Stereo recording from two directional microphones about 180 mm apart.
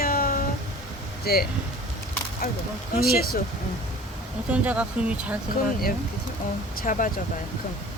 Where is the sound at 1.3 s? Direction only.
60° left (ahead or behind).